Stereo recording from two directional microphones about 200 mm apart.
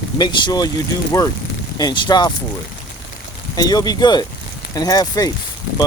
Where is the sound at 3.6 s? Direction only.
20° left (ahead or behind).